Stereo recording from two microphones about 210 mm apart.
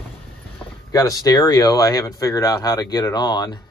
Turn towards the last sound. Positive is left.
turn(degrees=20)  # may be behind; listen again after turning